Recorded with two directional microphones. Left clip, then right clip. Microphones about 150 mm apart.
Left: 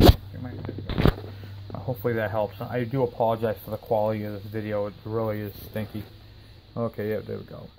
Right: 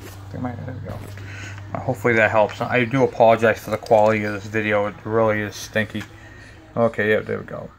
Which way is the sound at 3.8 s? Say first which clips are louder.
Right 9 dB; 15° left (ahead or behind).